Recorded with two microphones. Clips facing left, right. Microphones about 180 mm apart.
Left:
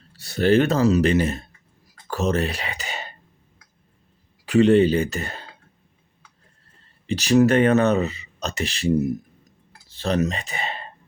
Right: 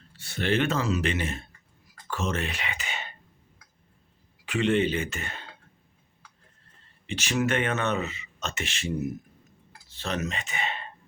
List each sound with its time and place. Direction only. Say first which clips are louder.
0.1 s speech: left 9 dB; 40° left (ahead or behind)
2.0 s a sound: left 8 dB; 40° left (ahead or behind)
4.4 s speech: left 9 dB; 35° left (ahead or behind)
7.1 s speech: left 10 dB; 35° left (ahead or behind)